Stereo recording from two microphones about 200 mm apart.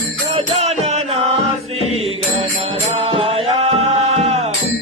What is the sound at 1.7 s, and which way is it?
Mantra, 30° right (ahead or behind).